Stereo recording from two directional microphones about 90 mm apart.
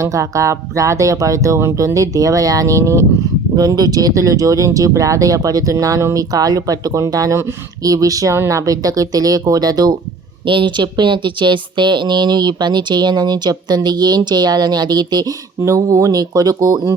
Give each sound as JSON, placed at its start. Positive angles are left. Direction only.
{"t": 0.0, "sound": "speech", "side_deg": -35}
{"t": 3.5, "sound": "speech", "side_deg": -50}
{"t": 10.4, "sound": "speech", "side_deg": -65}